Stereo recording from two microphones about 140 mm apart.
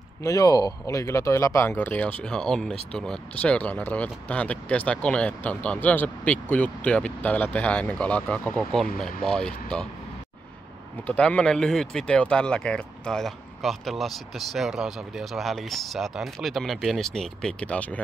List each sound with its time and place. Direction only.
0.2 s speech: 25° left (ahead or behind); by 9.8 s 5° left (ahead or behind)
11.1 s speech: 10° left (ahead or behind)